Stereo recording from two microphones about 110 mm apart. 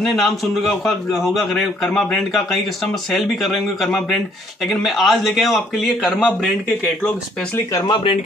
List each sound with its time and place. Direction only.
0.0 s a man's voice: centre (ahead or behind)
7.8 s speech: 50° left (ahead or behind)